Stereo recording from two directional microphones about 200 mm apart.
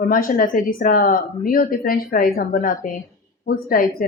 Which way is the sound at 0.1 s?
45° left (ahead or behind).